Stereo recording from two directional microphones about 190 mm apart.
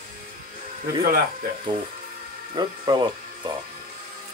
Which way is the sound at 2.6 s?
20° right (ahead or behind).